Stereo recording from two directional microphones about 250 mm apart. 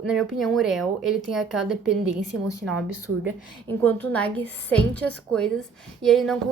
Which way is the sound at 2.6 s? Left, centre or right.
Right.